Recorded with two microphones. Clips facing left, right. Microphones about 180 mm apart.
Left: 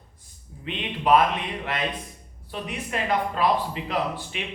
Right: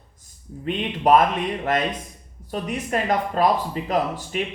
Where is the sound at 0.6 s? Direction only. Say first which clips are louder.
Right 6 dB; 45° right (ahead or behind).